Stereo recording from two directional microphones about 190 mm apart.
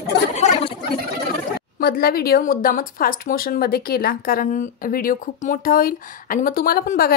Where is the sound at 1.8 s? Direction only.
55° left (ahead or behind).